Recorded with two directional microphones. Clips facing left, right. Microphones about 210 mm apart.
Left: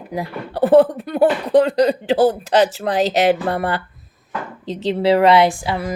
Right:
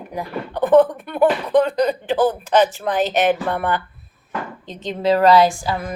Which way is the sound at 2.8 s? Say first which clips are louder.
Left 2 dB; 35° left (ahead or behind).